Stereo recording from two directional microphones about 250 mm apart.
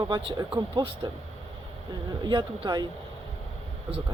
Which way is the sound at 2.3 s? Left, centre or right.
Centre.